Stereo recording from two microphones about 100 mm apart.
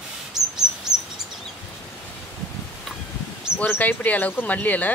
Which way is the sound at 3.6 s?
15° left (ahead or behind).